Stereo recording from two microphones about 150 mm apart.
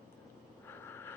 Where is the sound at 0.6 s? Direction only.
15° left (ahead or behind).